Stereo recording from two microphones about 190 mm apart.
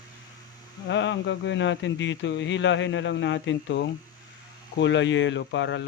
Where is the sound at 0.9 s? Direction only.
70° left (ahead or behind).